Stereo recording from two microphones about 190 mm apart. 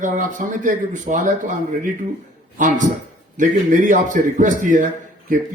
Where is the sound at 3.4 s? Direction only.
45° right (ahead or behind).